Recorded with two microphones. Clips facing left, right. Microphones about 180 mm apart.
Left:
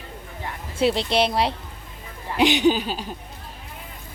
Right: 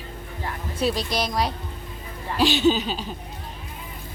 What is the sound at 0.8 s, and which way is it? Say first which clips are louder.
Speech: left 4 dB; 25° left (ahead or behind).